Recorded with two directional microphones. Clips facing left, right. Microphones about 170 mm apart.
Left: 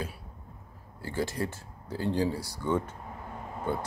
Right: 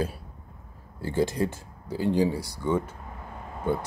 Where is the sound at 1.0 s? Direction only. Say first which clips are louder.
Right 6 dB; 20° right (ahead or behind).